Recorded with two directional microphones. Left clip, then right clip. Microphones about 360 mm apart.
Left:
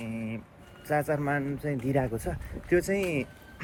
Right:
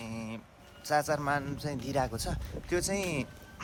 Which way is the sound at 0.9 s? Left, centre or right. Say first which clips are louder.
Left 1 dB; centre.